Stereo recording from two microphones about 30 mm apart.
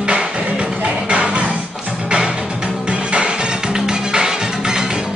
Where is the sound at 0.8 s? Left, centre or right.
Right.